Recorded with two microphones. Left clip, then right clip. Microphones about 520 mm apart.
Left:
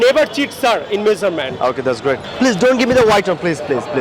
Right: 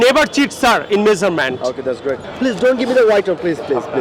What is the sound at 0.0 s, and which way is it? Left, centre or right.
Speech, right.